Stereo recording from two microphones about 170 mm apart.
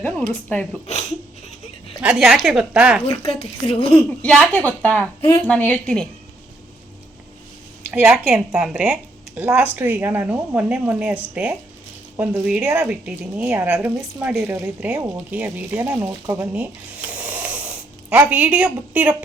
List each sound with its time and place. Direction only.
0.4 s a woman's voice: 5° left (ahead or behind)
2.0 s speech: 5° right (ahead or behind)
3.2 s a woman's voice: 35° left (ahead or behind)
4.2 s a woman's voice: 10° left (ahead or behind)
7.9 s speech: 10° right (ahead or behind)
17.1 s snoring: 10° right (ahead or behind)